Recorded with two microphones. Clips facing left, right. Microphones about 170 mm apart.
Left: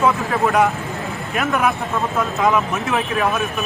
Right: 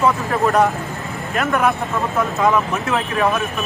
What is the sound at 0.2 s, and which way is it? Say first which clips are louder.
Speech: right 1 dB; centre (ahead or behind).